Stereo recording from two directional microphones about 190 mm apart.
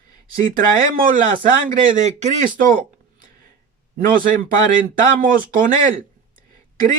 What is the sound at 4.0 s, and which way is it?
Speech, 45° right (ahead or behind).